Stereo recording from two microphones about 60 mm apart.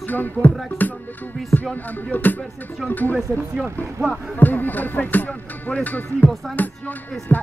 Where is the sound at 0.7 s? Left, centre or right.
Left.